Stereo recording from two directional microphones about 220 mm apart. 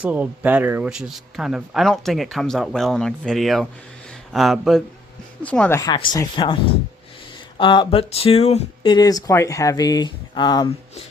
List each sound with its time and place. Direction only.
0.0 s speech: 5° right (ahead or behind); by 6.6 s 20° left (ahead or behind)
7.6 s speech: 20° left (ahead or behind)